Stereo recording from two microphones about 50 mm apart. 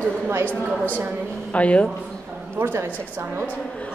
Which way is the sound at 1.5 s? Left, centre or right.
Left.